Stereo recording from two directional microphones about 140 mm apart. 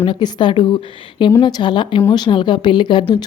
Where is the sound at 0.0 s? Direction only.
30° left (ahead or behind).